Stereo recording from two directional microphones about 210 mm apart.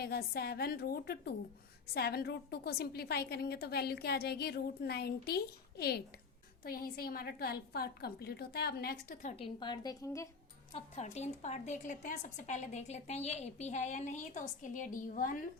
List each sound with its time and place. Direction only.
0.0 s a woman's voice: 50° left (ahead or behind)
9.3 s a woman's voice: 25° left (ahead or behind)
10.7 s a woman's voice: 30° left (ahead or behind)